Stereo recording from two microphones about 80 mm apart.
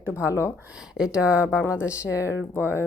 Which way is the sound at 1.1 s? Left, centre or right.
Centre.